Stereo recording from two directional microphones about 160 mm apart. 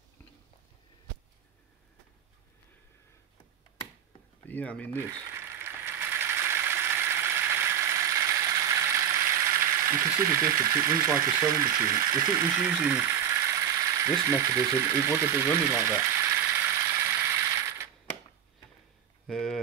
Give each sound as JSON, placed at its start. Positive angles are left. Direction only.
{"t": 4.5, "sound": "speech", "side_deg": 10}
{"t": 5.1, "sound": "mechanisms", "side_deg": -15}
{"t": 12.6, "sound": "speech", "side_deg": -10}
{"t": 19.2, "sound": "a sound", "side_deg": 0}